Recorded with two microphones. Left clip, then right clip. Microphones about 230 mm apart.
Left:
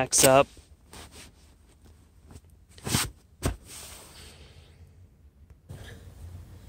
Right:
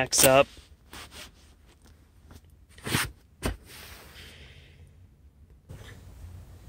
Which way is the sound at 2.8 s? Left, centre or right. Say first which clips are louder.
Right 1 dB; left.